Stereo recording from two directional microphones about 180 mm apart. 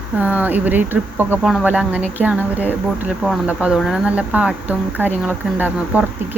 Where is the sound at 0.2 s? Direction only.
10° right (ahead or behind).